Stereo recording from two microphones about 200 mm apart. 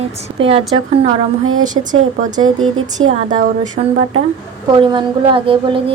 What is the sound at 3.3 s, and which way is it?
Speech, 40° right (ahead or behind).